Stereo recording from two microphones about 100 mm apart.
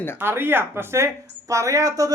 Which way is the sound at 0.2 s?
20° right (ahead or behind).